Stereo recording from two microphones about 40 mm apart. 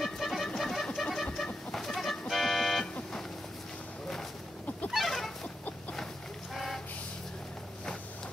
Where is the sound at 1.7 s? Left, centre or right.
Centre.